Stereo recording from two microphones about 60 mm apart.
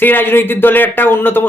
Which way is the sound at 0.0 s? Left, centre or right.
Left.